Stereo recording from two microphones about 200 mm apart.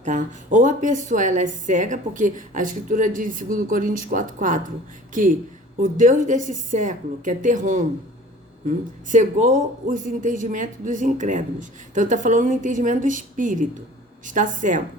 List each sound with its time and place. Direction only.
0.0 s a woman's voice: 40° right (ahead or behind)